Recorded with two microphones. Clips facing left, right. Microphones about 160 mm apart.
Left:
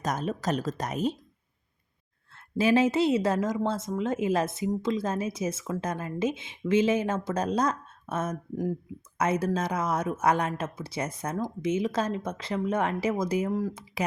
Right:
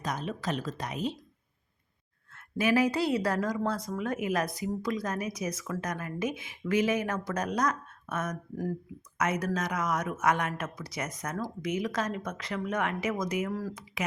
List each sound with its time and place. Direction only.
0.0 s speech: 45° left (ahead or behind)
2.3 s speech: 30° left (ahead or behind)
13.5 s speech: 20° left (ahead or behind)